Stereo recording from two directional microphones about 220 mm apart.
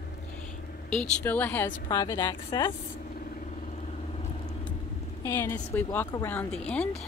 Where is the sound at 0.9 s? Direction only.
10° left (ahead or behind).